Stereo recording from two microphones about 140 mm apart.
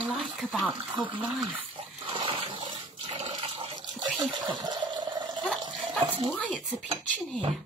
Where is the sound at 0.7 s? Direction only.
35° right (ahead or behind).